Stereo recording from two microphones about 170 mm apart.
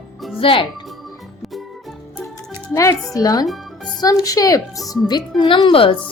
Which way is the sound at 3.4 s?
Centre (ahead or behind).